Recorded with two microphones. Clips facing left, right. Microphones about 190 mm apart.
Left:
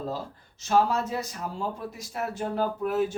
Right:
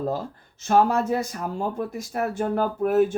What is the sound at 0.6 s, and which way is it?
Speech, 55° right (ahead or behind).